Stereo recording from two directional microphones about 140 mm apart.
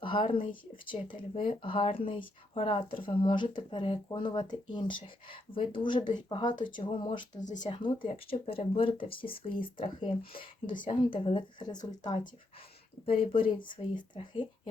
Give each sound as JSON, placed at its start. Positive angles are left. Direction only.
{"t": 0.0, "sound": "speech", "side_deg": 35}